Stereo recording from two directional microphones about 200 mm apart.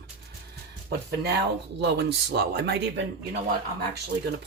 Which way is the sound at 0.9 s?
50° right (ahead or behind).